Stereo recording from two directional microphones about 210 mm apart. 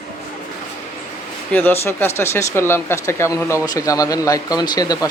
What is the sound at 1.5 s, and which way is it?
Speech, 10° left (ahead or behind).